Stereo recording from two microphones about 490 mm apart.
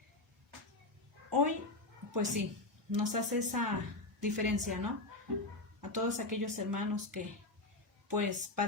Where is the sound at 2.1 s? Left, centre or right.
Right.